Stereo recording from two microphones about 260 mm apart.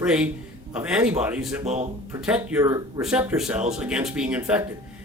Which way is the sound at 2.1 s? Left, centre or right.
Centre.